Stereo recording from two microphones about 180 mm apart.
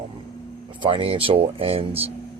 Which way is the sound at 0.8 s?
25° right (ahead or behind).